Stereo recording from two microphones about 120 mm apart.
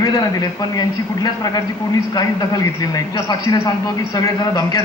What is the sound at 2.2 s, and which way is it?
A man's voice, 30° left (ahead or behind).